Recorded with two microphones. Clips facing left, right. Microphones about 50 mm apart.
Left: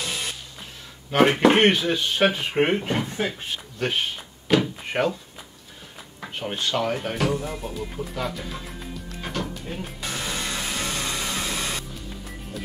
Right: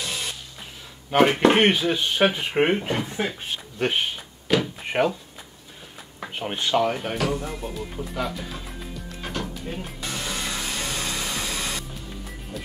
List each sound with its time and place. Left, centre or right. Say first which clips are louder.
0.0 s a sound: left 1 dB; centre
1.1 s speech: even; centre
3.8 s speech: right 2 dB; right
4.5 s speech: left 2 dB; centre
6.4 s speech: right 3 dB; centre
6.8 s speech: right 2 dB; centre
7.2 s music: left 1 dB; centre